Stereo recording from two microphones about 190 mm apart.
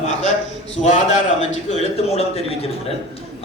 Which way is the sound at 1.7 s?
35° left (ahead or behind).